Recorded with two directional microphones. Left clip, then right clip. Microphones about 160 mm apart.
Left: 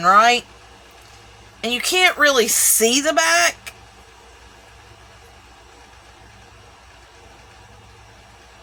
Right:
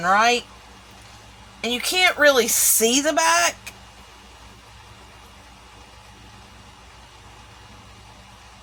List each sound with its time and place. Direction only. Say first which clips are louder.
0.0 s speech: left 5 dB; 30° left (ahead or behind)
1.6 s speech: left 3 dB; 30° left (ahead or behind)